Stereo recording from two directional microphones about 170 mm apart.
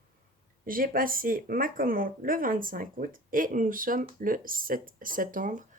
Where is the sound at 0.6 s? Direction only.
55° right (ahead or behind).